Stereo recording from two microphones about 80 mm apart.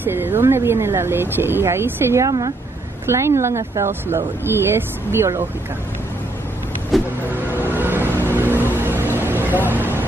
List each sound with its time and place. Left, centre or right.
0.0 s speech: right
2.2 s a woman's voice: right
3.1 s speech: right
6.9 s vehicle: centre
7.7 s vehicle: right
9.8 s a sound: right